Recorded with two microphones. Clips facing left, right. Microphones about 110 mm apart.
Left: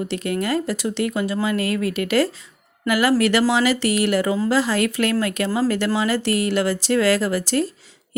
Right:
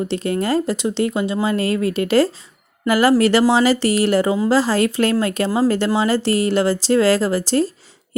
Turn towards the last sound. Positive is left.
turn(degrees=-30)  # may be behind; listen again after turning